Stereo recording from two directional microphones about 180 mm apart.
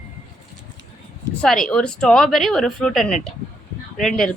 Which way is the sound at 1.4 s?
5° left (ahead or behind).